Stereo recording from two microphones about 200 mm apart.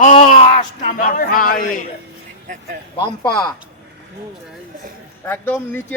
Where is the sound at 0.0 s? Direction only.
30° left (ahead or behind).